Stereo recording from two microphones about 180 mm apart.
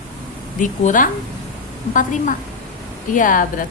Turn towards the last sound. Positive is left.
turn(degrees=50)  # may be behind; listen again after turning